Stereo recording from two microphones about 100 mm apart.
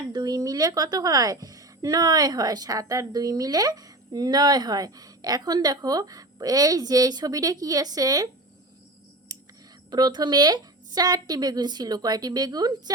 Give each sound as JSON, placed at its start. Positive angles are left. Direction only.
{"t": 0.1, "sound": "a woman's voice", "side_deg": -40}
{"t": 9.3, "sound": "whispering", "side_deg": -35}
{"t": 9.9, "sound": "a woman's voice", "side_deg": -45}